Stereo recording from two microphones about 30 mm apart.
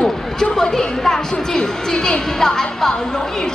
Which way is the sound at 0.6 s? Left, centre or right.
Centre.